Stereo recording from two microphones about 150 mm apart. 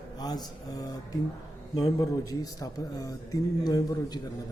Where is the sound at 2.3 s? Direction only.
25° left (ahead or behind).